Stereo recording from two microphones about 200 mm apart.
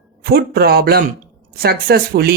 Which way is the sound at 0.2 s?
50° right (ahead or behind).